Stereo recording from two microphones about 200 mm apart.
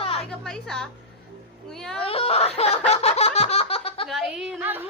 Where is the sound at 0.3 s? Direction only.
5° left (ahead or behind).